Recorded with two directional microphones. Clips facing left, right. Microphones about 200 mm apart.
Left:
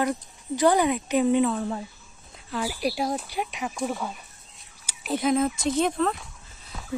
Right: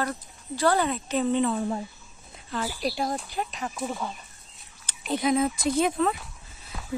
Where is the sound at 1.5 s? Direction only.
15° right (ahead or behind).